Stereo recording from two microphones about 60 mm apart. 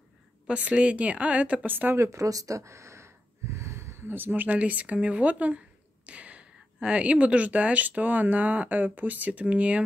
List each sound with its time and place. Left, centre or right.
0.5 s speech: centre
1.7 s speech: right
2.0 s a sound: right
4.6 s speech: right